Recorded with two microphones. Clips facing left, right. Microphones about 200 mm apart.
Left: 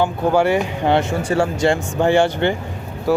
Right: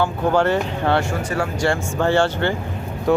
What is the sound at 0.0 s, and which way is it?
Speech, 10° left (ahead or behind).